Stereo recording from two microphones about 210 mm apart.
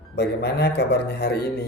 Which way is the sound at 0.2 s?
50° left (ahead or behind).